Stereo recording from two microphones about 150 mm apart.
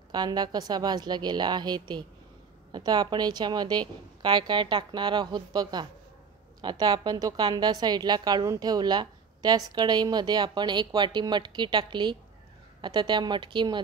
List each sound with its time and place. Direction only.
0.1 s a woman's voice: 25° right (ahead or behind)